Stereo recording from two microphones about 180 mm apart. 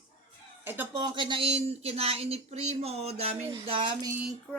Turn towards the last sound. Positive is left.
turn(degrees=-30)  # may be behind; listen again after turning